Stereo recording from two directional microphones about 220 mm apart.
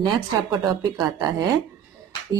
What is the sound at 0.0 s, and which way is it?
A woman's voice, 20° right (ahead or behind).